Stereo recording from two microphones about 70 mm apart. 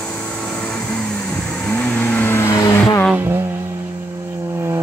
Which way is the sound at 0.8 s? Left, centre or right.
Centre.